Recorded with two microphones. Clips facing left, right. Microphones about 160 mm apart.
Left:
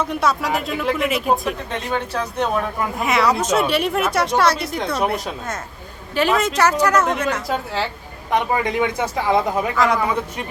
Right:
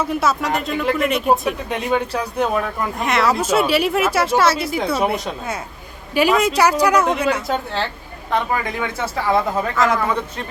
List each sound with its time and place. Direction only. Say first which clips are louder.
0.0 s speech: right 1 dB; 5° right (ahead or behind)
1.7 s speech: right 5 dB; 10° right (ahead or behind)
3.0 s speech: even; centre (ahead or behind)
8.3 s speech: left 2 dB; 15° left (ahead or behind)
9.7 s speech: right 1 dB; centre (ahead or behind)